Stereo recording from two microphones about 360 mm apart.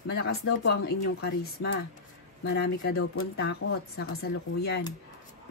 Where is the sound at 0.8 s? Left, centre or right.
Left.